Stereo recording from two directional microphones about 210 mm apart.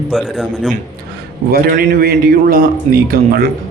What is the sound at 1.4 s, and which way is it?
A man's voice, 45° right (ahead or behind).